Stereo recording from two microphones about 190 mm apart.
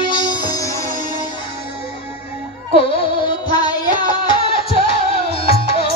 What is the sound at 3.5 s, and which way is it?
Music, 25° left (ahead or behind).